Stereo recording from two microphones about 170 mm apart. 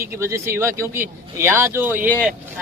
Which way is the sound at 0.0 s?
15° right (ahead or behind).